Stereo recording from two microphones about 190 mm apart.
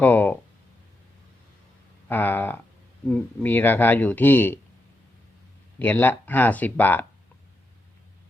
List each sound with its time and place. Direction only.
0.0 s speech: 10° left (ahead or behind)
2.0 s speech: 10° left (ahead or behind)
5.8 s speech: 10° left (ahead or behind)